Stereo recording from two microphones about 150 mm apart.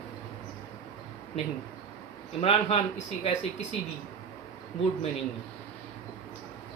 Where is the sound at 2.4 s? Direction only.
40° left (ahead or behind).